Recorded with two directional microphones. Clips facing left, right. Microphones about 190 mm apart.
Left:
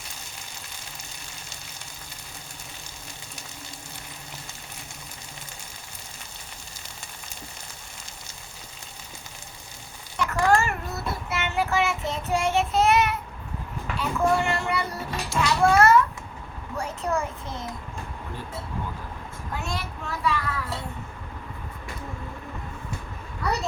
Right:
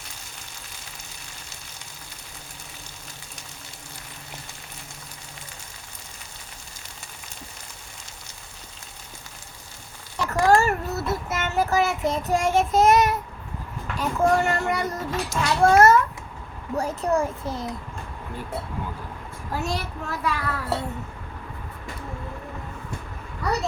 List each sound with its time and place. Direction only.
10.2 s child singing: 40° right (ahead or behind)
13.9 s a child's voice: 40° right (ahead or behind)
18.5 s speech: 65° right (ahead or behind)
19.5 s child singing: 40° right (ahead or behind)